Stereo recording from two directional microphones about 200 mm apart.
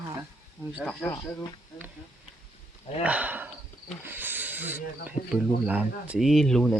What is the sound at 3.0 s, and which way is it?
Speech, 5° right (ahead or behind).